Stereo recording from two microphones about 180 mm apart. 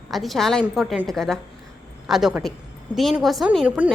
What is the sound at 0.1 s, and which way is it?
A woman's voice, centre (ahead or behind).